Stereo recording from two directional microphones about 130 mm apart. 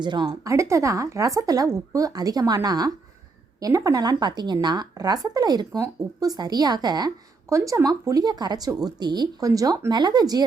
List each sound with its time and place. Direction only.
0.0 s speech: 35° right (ahead or behind)